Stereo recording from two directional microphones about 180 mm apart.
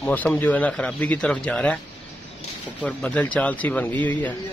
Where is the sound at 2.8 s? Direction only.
5° left (ahead or behind).